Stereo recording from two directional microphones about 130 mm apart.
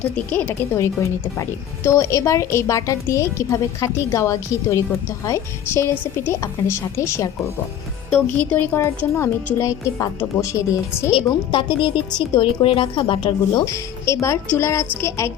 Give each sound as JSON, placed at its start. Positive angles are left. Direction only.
{"t": 0.2, "sound": "speech", "side_deg": 15}
{"t": 11.1, "sound": "speech", "side_deg": 40}
{"t": 13.7, "sound": "speech", "side_deg": 20}